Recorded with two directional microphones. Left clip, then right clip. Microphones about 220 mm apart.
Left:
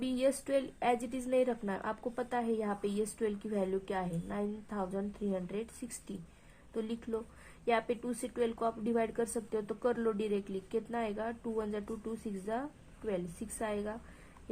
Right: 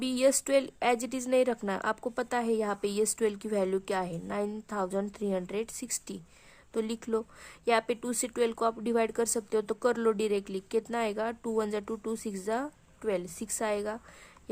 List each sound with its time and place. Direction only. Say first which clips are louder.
0.0 s speech: right 6 dB; 40° right (ahead or behind)
6.7 s speech: right 6 dB; 40° right (ahead or behind)